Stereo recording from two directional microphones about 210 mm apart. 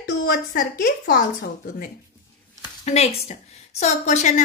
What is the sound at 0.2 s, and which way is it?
A woman's voice, 45° left (ahead or behind).